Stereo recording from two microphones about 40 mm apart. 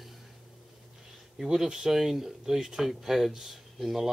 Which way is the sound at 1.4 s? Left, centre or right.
Centre.